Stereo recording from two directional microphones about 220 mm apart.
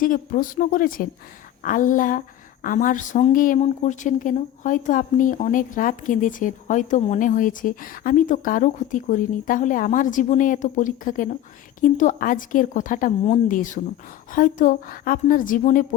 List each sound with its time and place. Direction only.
0.0 s a woman's voice: 40° left (ahead or behind)